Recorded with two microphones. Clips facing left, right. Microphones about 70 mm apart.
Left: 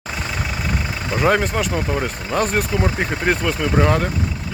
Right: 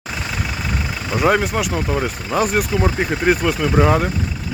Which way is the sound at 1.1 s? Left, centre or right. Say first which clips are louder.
Right 1 dB; centre.